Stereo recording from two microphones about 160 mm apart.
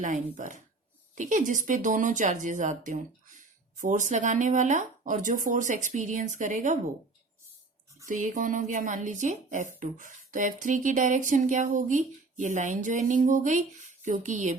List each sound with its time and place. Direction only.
0.0 s speech: 55° right (ahead or behind)
8.0 s speech: 55° right (ahead or behind)